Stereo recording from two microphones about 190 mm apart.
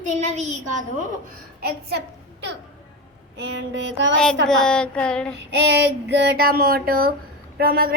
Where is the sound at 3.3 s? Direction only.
70° right (ahead or behind).